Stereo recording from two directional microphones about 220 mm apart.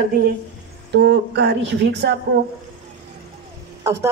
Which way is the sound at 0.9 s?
50° right (ahead or behind).